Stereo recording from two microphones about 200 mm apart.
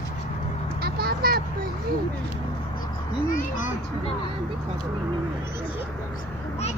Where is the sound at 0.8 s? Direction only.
50° right (ahead or behind).